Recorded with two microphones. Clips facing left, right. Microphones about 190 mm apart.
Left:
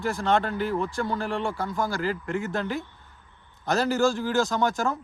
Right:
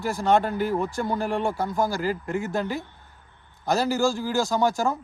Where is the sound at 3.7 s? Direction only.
5° right (ahead or behind).